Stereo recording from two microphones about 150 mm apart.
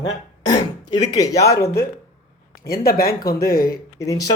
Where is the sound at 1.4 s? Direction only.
90° left.